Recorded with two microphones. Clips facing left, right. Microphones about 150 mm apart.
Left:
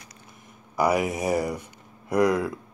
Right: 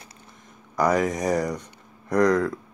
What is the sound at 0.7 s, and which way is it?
Speech, 10° left (ahead or behind).